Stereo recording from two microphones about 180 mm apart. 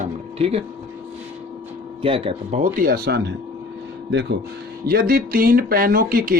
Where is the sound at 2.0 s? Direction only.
30° right (ahead or behind).